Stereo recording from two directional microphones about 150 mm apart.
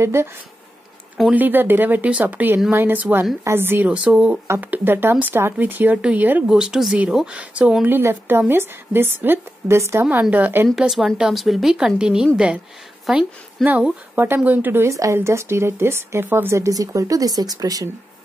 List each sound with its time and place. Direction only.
0.0 s speech: 15° right (ahead or behind)
1.1 s speech: 5° right (ahead or behind)
10.9 s a woman's voice: centre (ahead or behind); by 17.8 s 25° right (ahead or behind)